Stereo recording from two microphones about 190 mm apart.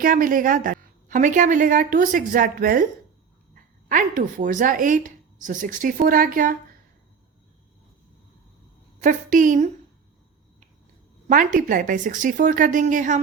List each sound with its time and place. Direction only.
0.0 s speech: 45° right (ahead or behind)
9.0 s speech: 45° right (ahead or behind)
11.3 s speech: 45° right (ahead or behind)